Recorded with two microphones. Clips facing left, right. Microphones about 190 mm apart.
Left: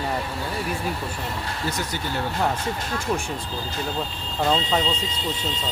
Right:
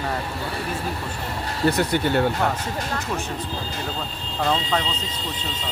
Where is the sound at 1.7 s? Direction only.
60° right (ahead or behind).